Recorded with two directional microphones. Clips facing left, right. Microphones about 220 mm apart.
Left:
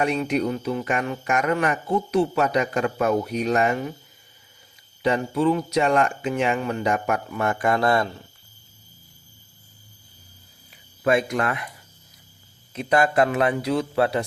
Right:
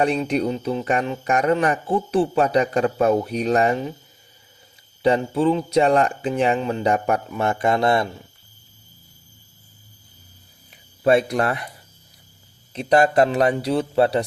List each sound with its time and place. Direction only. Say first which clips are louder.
0.3 s speech: right 2 dB; 30° right (ahead or behind)
5.0 s speech: right 3 dB; 30° right (ahead or behind)
11.0 s speech: right 3 dB; 35° right (ahead or behind)
12.7 s speech: right 3 dB; 30° right (ahead or behind)